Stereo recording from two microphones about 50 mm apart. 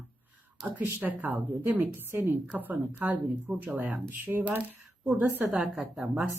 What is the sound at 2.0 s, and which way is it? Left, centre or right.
Speech, right.